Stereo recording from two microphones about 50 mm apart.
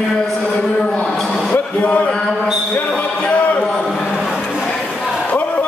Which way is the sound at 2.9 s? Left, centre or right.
Left.